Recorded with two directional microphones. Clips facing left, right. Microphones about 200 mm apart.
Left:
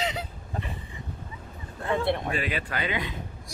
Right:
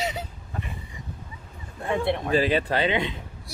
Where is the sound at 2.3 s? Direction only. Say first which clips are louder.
Right 8 dB; 35° right (ahead or behind).